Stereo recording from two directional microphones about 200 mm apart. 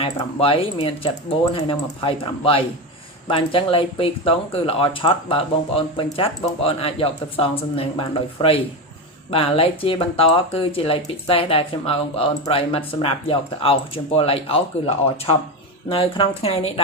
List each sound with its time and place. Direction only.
0.0 s speech: 25° left (ahead or behind)